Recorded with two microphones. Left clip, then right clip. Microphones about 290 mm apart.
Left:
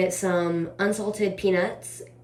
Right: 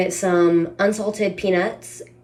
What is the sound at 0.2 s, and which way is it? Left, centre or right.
Speech, centre.